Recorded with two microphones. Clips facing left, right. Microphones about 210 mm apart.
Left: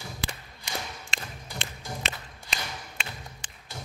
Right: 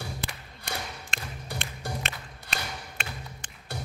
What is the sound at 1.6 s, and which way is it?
Music, 55° right (ahead or behind).